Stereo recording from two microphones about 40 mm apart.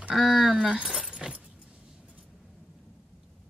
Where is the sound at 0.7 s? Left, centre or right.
Centre.